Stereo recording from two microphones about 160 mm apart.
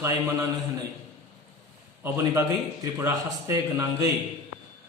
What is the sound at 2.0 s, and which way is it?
A man's voice, 15° right (ahead or behind).